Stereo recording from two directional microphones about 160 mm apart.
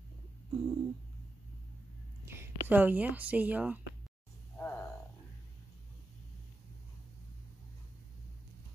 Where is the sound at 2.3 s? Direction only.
15° right (ahead or behind).